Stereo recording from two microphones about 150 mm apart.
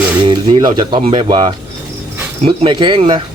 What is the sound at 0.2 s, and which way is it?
Speech, 30° right (ahead or behind).